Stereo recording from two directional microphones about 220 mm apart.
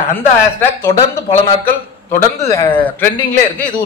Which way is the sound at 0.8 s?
10° left (ahead or behind).